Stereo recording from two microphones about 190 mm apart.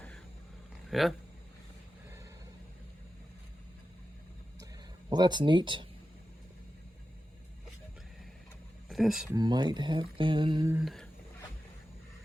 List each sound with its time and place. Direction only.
0.9 s speech: centre (ahead or behind)
4.6 s a sound: 20° right (ahead or behind)
8.9 s speech: centre (ahead or behind)
9.3 s speech: 20° right (ahead or behind)
10.7 s speech: 10° right (ahead or behind)